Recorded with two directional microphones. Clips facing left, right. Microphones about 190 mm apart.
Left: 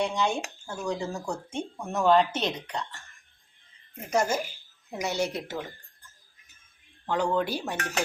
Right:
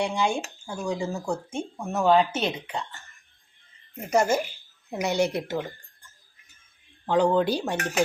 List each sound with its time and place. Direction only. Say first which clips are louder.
0.0 s speech: right 2 dB; 10° right (ahead or behind)
4.1 s speech: right 4 dB; 10° right (ahead or behind)
7.1 s speech: right 5 dB; 20° right (ahead or behind)